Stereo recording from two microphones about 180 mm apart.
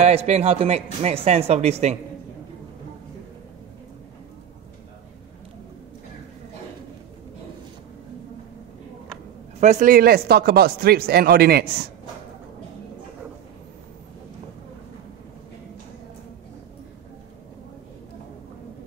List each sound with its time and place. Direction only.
0.0 s a man's voice: 35° right (ahead or behind)
9.6 s speech: 45° right (ahead or behind); by 11.9 s 60° right (ahead or behind)